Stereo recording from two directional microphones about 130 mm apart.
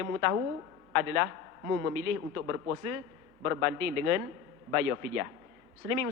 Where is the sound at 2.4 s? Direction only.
20° right (ahead or behind).